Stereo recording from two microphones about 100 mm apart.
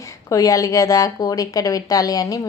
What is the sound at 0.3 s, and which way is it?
A woman's voice, 35° left (ahead or behind).